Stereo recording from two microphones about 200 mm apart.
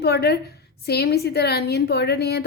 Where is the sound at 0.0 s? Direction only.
55° left (ahead or behind).